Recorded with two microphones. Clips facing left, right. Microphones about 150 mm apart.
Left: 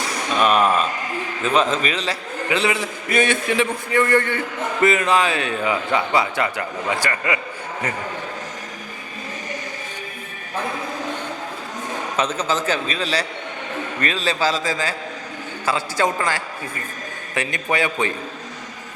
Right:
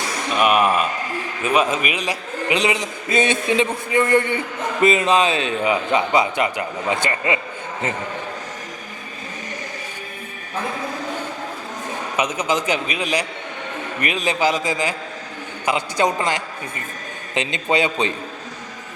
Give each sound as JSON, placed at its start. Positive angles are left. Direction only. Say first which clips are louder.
{"t": 0.3, "sound": "a man's voice", "louder": "even", "side_deg": -10}
{"t": 12.1, "sound": "a man's voice", "louder": "right 1 dB", "side_deg": -15}